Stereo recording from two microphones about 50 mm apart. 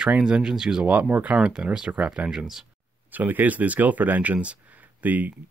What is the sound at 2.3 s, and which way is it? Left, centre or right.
Speech, centre.